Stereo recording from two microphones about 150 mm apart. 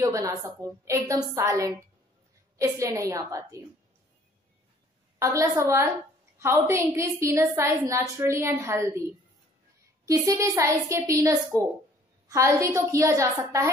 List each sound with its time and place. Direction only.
0.0 s a woman's voice: 20° right (ahead or behind)
5.2 s a woman's voice: 20° right (ahead or behind)
10.0 s a woman's voice: 20° right (ahead or behind)